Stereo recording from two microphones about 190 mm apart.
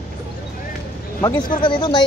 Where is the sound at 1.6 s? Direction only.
25° left (ahead or behind).